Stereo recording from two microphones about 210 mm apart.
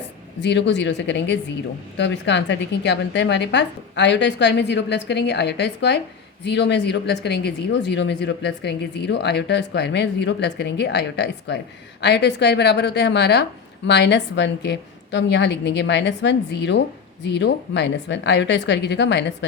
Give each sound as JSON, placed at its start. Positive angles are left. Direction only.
{"t": 0.4, "sound": "speech", "side_deg": 55}